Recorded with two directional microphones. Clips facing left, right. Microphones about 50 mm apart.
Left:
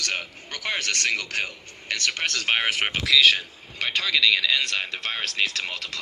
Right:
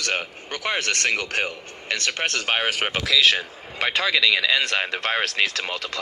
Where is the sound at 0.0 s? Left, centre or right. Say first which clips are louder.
Right 3 dB; right.